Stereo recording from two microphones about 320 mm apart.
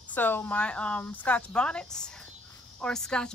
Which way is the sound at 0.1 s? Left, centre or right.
Centre.